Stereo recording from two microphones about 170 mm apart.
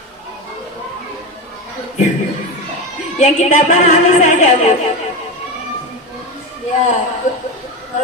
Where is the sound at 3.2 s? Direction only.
45° left (ahead or behind).